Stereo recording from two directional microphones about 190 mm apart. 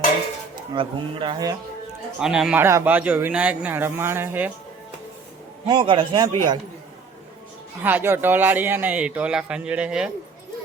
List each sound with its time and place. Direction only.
0.7 s speech: 25° right (ahead or behind)
2.1 s a man's voice: 5° right (ahead or behind)
5.6 s speech: 25° right (ahead or behind)
7.8 s a man's voice: 10° right (ahead or behind)